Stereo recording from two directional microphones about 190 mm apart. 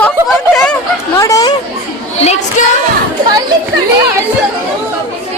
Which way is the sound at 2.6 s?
40° left (ahead or behind).